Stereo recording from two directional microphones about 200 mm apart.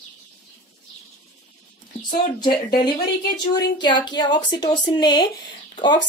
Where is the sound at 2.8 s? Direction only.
20° left (ahead or behind).